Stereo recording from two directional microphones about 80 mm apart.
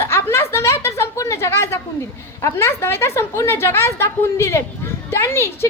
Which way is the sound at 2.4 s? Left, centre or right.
Left.